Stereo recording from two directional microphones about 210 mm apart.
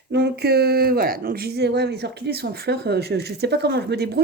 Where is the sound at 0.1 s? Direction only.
50° right (ahead or behind).